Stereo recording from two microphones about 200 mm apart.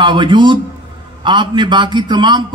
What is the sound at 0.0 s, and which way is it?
A man's voice, 25° right (ahead or behind).